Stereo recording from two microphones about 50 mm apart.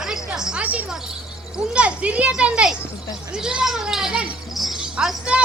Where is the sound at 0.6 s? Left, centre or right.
Right.